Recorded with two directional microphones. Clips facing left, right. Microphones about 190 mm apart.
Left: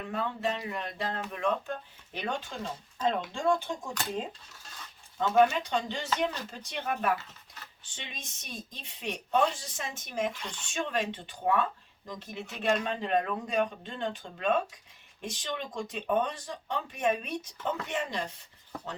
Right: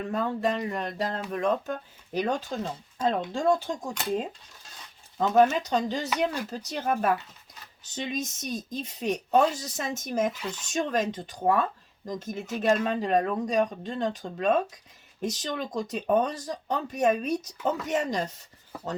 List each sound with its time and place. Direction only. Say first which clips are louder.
0.1 s speech: right 4 dB; 40° right (ahead or behind)
5.3 s speech: right 3 dB; 40° right (ahead or behind)
6.1 s speech: right 3 dB; 10° right (ahead or behind)
6.5 s speech: right 6 dB; 40° right (ahead or behind)
10.3 s speech: right 7 dB; 5° right (ahead or behind)
10.7 s speech: right 5 dB; 40° right (ahead or behind)
18.7 s speech: right 3 dB; 5° right (ahead or behind)